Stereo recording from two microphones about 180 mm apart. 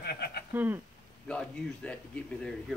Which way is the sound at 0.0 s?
60° left (ahead or behind).